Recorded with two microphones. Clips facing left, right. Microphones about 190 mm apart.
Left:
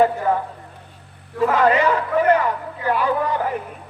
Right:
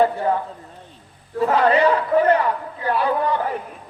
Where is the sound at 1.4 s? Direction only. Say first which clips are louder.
Even; 35° right (ahead or behind).